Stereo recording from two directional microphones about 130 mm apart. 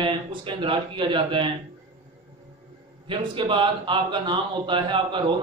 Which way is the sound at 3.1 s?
40° right (ahead or behind).